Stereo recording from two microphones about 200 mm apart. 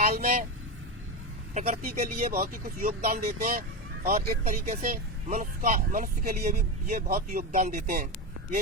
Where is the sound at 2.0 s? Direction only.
40° right (ahead or behind).